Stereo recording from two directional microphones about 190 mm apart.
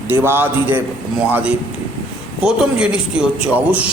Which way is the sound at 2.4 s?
5° right (ahead or behind).